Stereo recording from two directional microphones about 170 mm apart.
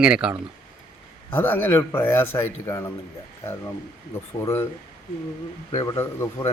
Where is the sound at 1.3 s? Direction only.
15° left (ahead or behind).